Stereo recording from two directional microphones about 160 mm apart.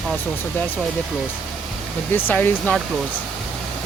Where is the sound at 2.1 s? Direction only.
10° left (ahead or behind).